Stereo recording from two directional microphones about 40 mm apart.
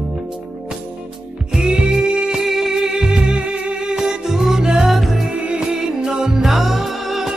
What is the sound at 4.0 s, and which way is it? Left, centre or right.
Music, centre.